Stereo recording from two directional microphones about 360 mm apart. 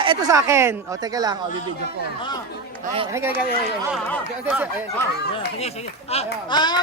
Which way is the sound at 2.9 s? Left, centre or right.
Centre.